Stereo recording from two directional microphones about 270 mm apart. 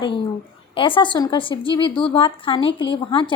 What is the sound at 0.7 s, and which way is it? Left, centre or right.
A woman's voice, centre.